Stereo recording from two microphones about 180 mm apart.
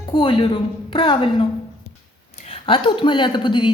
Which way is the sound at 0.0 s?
25° left (ahead or behind).